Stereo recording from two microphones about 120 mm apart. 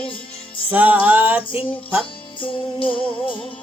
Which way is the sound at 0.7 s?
15° right (ahead or behind).